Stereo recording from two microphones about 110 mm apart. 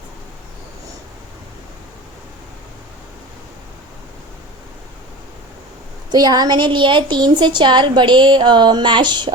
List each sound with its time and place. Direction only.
6.1 s a woman's voice: 35° right (ahead or behind)